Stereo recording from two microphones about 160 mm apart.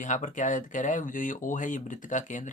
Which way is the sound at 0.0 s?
50° left (ahead or behind).